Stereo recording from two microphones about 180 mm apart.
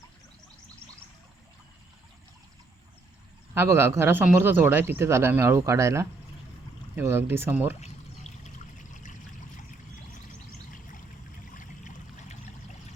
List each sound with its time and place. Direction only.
3.5 s a man's voice: 15° right (ahead or behind)
7.7 s pour: 40° left (ahead or behind)
11.5 s a sound: 45° left (ahead or behind)